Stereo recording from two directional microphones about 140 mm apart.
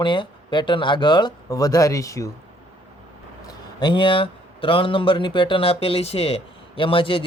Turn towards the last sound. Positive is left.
turn(degrees=40)  # may be behind; listen again after turning